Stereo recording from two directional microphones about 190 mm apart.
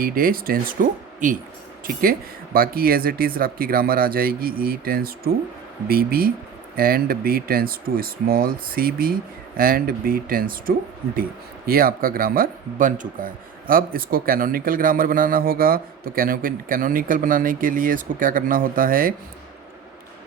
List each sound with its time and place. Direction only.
0.0 s speech: 50° right (ahead or behind)